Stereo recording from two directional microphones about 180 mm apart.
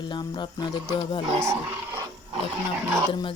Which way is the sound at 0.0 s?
25° left (ahead or behind).